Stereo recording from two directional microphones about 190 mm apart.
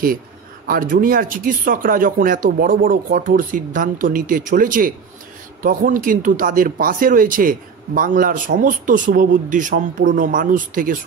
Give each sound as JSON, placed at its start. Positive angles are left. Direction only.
{"t": 0.7, "sound": "speech", "side_deg": -50}